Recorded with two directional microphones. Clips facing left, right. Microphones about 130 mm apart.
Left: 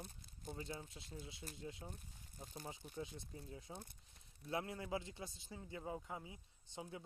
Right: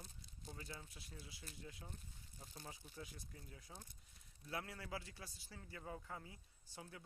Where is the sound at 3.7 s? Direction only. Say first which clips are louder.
Left 6 dB; 55° left (ahead or behind).